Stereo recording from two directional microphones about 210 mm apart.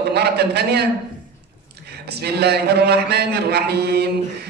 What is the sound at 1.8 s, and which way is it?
A man's voice, 50° right (ahead or behind).